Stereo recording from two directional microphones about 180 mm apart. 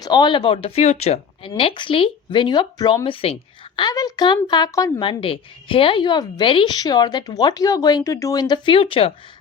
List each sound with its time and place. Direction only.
0.0 s a woman's voice: 25° left (ahead or behind)